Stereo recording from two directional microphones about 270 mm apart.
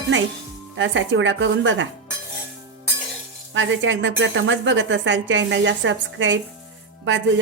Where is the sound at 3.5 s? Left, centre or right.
Right.